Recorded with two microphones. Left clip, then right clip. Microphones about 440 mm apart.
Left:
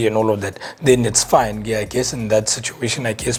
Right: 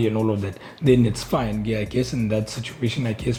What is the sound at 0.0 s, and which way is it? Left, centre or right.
Speech, left.